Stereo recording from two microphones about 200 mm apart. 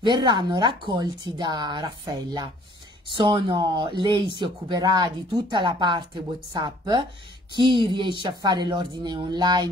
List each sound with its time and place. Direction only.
0.0 s speech: 20° right (ahead or behind)